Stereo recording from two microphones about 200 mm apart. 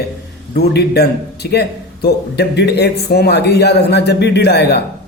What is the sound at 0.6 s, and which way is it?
A man's voice, 55° left (ahead or behind).